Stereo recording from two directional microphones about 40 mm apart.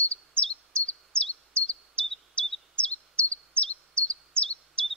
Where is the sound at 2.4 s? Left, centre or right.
Left.